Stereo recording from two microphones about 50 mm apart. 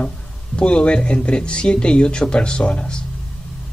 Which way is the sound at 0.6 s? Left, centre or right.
Left.